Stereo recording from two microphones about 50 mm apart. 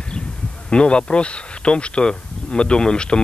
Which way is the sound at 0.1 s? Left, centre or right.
Centre.